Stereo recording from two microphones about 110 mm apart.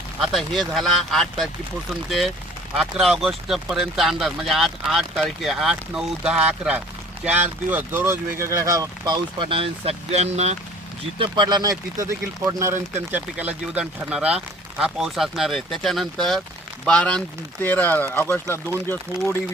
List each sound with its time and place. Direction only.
0.2 s speech: centre (ahead or behind); by 9.1 s 30° right (ahead or behind)
9.4 s speech: 55° right (ahead or behind); by 10.6 s 80° right
11.2 s speech: 45° right (ahead or behind); by 19.4 s 20° left (ahead or behind)